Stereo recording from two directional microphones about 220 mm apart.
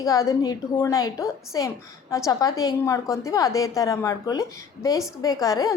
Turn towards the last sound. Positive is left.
turn(degrees=15)  # may be behind; listen again after turning